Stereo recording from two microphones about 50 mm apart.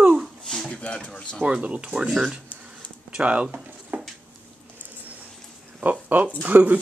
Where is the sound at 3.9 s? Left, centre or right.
Right.